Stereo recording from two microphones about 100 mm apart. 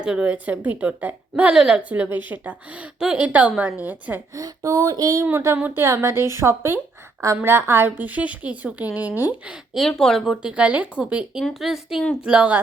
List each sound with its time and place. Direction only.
0.0 s a woman's voice: 10° right (ahead or behind)
1.9 s a woman's voice: 20° right (ahead or behind)
4.4 s a sound: 35° right (ahead or behind)
5.2 s a woman's voice: 25° right (ahead or behind)
9.7 s speech: 5° left (ahead or behind)
10.4 s a woman's voice: 10° right (ahead or behind)